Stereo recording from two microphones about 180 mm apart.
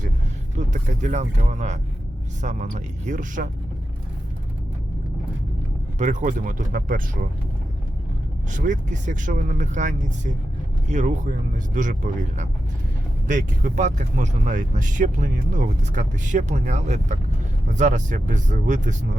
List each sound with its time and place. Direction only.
0.5 s speech: 45° right (ahead or behind)
6.0 s speech: 45° right (ahead or behind)
8.4 s speech: 45° right (ahead or behind)
13.2 s speech: 45° right (ahead or behind)